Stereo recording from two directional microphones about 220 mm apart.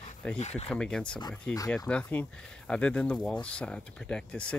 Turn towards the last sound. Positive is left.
turn(degrees=5)  # may be behind; listen again after turning